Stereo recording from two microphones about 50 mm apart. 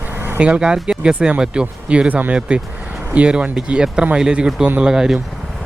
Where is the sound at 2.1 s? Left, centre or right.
Right; by 5.1 s centre.